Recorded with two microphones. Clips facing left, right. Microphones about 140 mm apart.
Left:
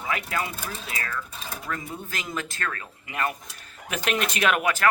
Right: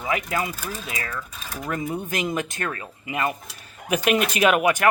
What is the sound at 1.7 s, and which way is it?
Speech, 20° right (ahead or behind).